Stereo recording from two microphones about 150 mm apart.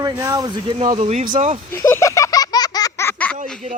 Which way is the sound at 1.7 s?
20° left (ahead or behind).